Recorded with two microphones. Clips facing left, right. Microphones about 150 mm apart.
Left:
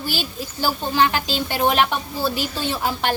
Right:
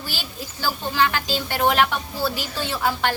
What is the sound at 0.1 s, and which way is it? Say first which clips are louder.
Speech: left 6 dB; 15° left (ahead or behind).